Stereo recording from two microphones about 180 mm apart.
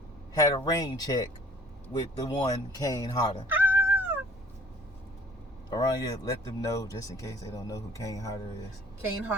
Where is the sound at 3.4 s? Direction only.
10° right (ahead or behind).